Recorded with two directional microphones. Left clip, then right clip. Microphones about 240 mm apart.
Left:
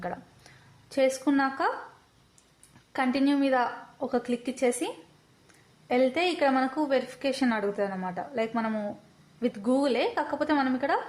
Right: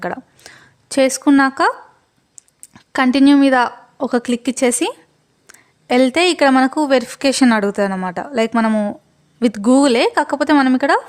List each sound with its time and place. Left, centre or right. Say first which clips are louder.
0.0 s speech: right 11 dB; right
2.9 s a woman's voice: right 14 dB; right